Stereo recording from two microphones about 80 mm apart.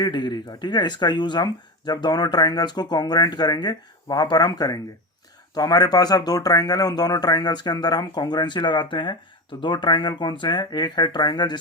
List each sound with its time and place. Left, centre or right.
0.0 s speech: left